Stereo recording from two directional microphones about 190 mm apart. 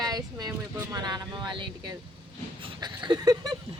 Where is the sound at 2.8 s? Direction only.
25° right (ahead or behind).